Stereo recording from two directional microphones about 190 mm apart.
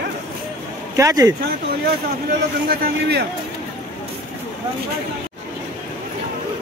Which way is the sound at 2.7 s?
55° right (ahead or behind).